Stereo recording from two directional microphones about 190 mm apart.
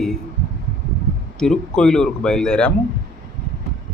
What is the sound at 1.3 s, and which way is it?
Speech, 5° left (ahead or behind).